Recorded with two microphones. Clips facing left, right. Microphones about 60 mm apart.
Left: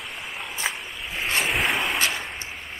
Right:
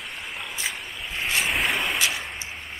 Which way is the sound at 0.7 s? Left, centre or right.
Centre.